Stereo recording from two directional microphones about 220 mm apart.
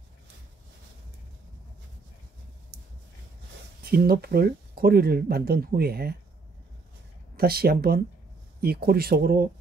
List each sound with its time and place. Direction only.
3.8 s speech: 45° right (ahead or behind)
7.3 s speech: 45° right (ahead or behind)